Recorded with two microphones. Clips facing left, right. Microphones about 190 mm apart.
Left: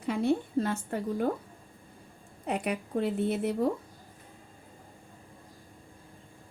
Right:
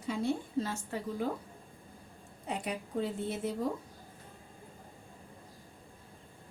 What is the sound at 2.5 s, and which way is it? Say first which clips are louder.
A woman's voice: left 6 dB; 65° left (ahead or behind).